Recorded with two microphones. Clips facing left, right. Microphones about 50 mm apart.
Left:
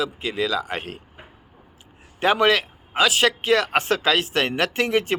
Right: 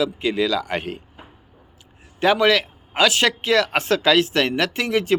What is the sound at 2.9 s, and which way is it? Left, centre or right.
Speech, centre.